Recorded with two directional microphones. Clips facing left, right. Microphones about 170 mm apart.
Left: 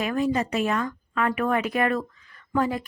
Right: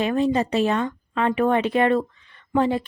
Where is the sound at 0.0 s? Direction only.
25° right (ahead or behind).